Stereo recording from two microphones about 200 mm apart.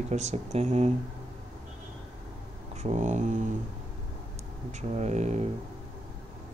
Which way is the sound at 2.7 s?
35° right (ahead or behind).